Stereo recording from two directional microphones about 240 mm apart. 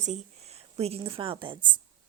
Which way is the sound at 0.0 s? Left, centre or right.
Right.